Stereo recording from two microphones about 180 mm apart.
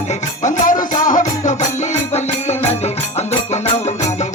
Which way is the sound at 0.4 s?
45° left (ahead or behind).